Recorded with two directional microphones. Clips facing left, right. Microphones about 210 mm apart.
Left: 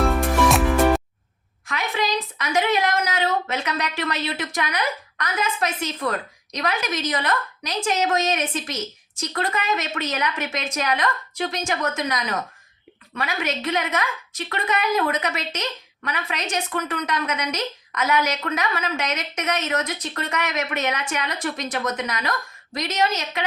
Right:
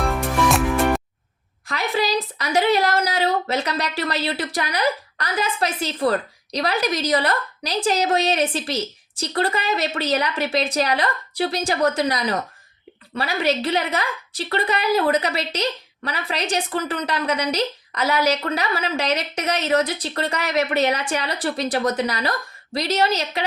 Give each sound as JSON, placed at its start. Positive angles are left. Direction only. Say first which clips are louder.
{"t": 0.0, "sound": "music", "louder": "left 2 dB", "side_deg": 0}
{"t": 1.6, "sound": "a woman's voice", "louder": "right 3 dB", "side_deg": -35}